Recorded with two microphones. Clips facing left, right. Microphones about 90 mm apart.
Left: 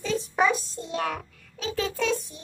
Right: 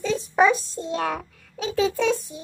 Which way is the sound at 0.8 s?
35° right (ahead or behind).